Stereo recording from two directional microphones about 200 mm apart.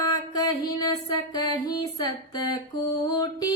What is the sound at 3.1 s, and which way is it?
Female singing, 20° left (ahead or behind).